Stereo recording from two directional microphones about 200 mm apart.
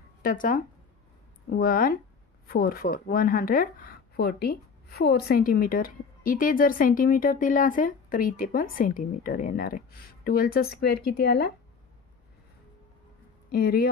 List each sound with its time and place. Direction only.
0.2 s speech: 45° left (ahead or behind)
13.5 s speech: 50° left (ahead or behind)